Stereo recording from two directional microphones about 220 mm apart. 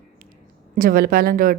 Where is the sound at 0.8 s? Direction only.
40° right (ahead or behind).